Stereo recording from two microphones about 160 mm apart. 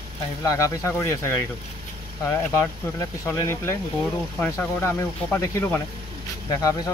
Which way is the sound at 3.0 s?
15° left (ahead or behind).